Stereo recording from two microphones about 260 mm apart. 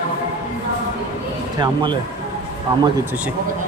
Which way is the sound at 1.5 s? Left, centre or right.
Centre.